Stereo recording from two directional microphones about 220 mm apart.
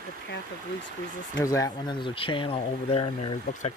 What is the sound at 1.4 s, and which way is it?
Speech, 15° left (ahead or behind).